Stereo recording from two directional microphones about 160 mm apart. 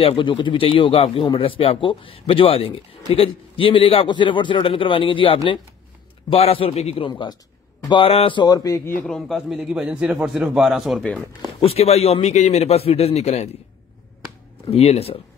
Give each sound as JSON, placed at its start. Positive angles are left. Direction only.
{"t": 0.0, "sound": "speech", "side_deg": 30}
{"t": 7.1, "sound": "a sound", "side_deg": 30}
{"t": 9.0, "sound": "a man's voice", "side_deg": 0}
{"t": 11.6, "sound": "speech", "side_deg": 40}
{"t": 14.7, "sound": "speech", "side_deg": 40}